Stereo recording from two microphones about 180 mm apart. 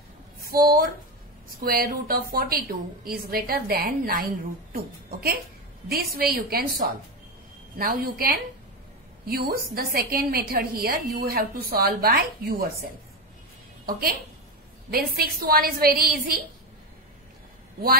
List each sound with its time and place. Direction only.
0.4 s a woman's voice: 55° right (ahead or behind)
7.7 s a woman's voice: 55° right (ahead or behind)
13.8 s a woman's voice: 55° right (ahead or behind)